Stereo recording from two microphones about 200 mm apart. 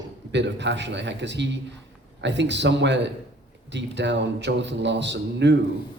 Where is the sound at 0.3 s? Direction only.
60° right (ahead or behind).